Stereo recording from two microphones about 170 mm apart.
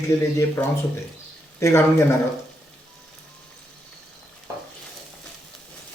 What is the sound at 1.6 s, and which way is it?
Speech, 15° left (ahead or behind).